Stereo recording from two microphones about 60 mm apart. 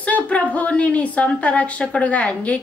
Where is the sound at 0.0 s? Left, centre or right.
Left.